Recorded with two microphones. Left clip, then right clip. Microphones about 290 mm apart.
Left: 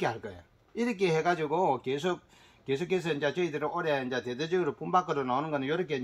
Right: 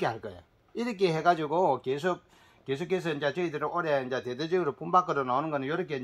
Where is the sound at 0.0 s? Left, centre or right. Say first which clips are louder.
Right 1 dB; centre.